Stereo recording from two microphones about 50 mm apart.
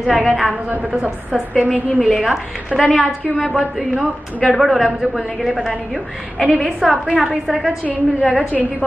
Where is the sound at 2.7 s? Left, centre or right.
Centre.